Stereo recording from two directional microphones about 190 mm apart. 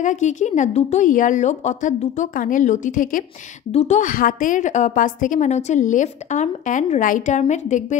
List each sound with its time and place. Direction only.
0.0 s a woman's voice: 40° left (ahead or behind)